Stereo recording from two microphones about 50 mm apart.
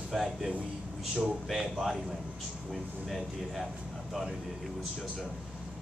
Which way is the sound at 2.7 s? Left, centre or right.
Centre.